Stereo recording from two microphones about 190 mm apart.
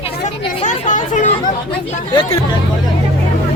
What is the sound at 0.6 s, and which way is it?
Speech, 40° left (ahead or behind).